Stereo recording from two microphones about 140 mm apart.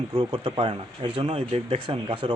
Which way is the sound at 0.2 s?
40° right (ahead or behind).